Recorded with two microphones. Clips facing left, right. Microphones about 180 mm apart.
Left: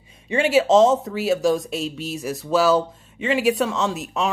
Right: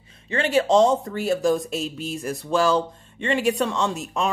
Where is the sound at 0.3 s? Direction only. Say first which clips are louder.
Left 3 dB; 10° left (ahead or behind).